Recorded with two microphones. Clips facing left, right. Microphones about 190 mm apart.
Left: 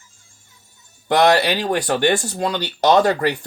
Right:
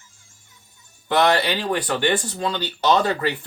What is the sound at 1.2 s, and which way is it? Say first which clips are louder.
Speech: left 5 dB; 80° left.